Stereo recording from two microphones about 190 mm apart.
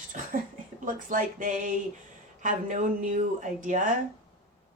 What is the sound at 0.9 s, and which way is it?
Speech, 45° right (ahead or behind).